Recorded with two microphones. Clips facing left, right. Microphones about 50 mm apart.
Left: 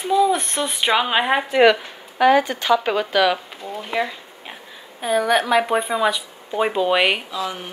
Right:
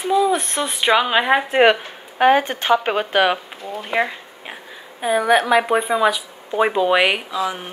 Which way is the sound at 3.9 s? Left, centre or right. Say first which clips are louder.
Right 3 dB; right.